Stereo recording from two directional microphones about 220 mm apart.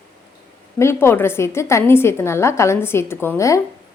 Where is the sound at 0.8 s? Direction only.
10° left (ahead or behind).